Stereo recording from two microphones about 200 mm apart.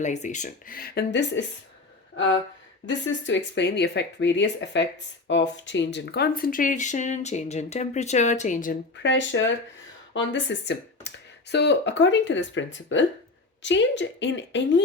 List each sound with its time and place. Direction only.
0.0 s speech: 35° left (ahead or behind); by 1.5 s 55° left (ahead or behind)
2.8 s speech: 65° left (ahead or behind); by 8.7 s 40° left (ahead or behind)
9.0 s speech: 65° left (ahead or behind)